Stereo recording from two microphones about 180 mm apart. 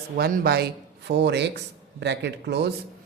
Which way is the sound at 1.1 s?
70° right (ahead or behind).